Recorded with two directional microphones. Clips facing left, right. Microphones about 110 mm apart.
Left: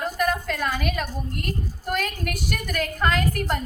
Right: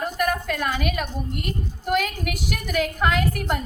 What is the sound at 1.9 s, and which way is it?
A woman's voice, 10° right (ahead or behind).